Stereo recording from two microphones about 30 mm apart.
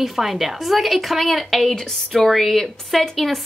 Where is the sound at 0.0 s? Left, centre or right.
Centre.